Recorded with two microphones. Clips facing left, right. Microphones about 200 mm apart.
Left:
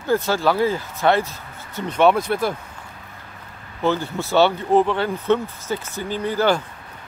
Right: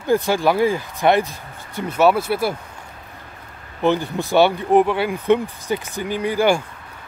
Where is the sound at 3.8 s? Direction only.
15° right (ahead or behind).